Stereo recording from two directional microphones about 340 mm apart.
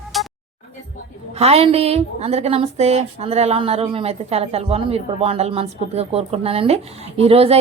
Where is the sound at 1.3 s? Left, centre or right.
Centre.